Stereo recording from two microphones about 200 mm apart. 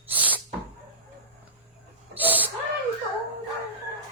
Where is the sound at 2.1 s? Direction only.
10° right (ahead or behind).